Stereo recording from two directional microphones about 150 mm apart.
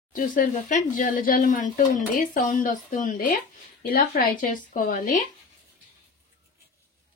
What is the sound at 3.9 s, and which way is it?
Speech, 80° left.